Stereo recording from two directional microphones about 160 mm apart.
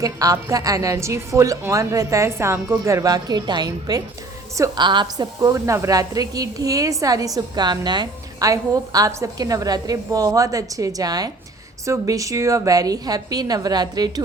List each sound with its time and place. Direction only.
0.0 s a woman's voice: 20° right (ahead or behind)